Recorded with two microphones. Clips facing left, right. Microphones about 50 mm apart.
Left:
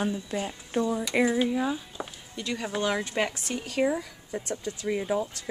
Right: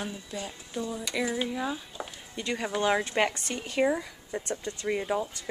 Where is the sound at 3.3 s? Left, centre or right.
Centre.